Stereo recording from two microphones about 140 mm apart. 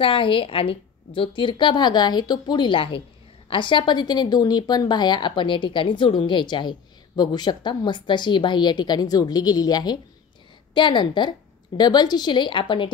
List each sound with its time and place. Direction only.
0.0 s speech: 40° left (ahead or behind)